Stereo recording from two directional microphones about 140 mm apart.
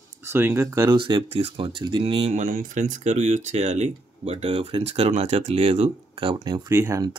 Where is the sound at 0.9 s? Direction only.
35° right (ahead or behind).